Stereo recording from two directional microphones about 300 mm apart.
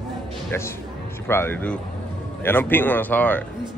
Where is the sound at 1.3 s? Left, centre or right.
Centre.